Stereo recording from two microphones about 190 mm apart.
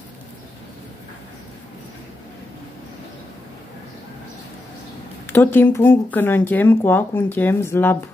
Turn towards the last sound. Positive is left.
turn(degrees=10)  # may be behind; listen again after turning